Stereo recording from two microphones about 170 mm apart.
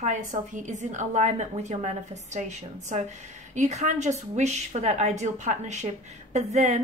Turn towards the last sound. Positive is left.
turn(degrees=-40)  # may be behind; listen again after turning